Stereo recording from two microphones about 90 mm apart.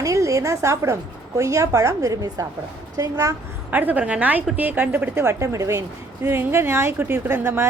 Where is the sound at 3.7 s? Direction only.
20° right (ahead or behind).